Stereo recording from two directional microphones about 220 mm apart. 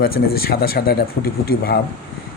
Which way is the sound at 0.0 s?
45° left (ahead or behind).